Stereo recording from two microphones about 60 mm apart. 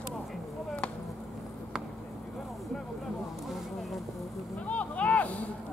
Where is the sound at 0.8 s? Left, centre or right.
Centre.